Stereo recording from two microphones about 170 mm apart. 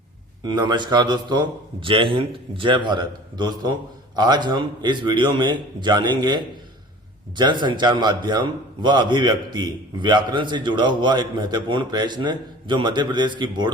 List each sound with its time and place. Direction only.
0.4 s a man's voice: 25° right (ahead or behind)